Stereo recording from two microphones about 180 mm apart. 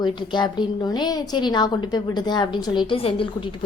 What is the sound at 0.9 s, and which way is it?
Speech, 25° left (ahead or behind).